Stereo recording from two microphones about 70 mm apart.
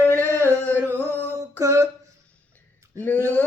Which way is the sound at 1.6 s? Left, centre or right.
Right.